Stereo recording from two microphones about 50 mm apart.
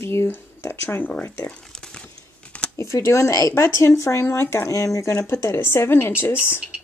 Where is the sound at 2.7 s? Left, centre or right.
Left.